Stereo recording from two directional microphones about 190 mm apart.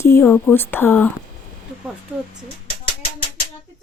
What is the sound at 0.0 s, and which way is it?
Speech, 15° left (ahead or behind).